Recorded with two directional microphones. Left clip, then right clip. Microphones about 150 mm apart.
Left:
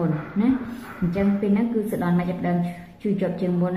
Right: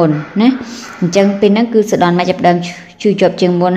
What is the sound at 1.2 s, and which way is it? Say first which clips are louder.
A woman's voice: right 14 dB; 65° right (ahead or behind).